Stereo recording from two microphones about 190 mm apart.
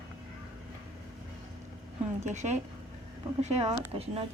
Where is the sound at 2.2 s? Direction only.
40° right (ahead or behind).